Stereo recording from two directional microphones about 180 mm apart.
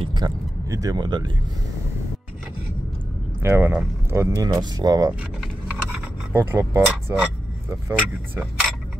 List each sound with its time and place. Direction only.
0.0 s speech: 25° right (ahead or behind)
3.4 s speech: 15° right (ahead or behind)
6.3 s speech: 15° right (ahead or behind)